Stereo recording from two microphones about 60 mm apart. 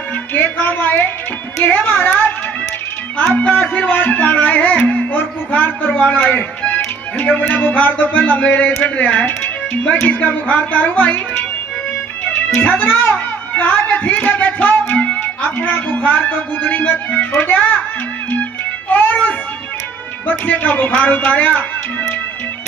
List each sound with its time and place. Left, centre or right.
0.3 s a man's voice: left
3.3 s a man's voice: left
12.5 s a man's voice: left
18.3 s music: left
20.2 s a man's voice: left